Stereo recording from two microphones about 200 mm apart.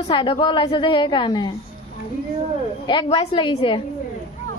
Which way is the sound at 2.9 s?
25° left (ahead or behind).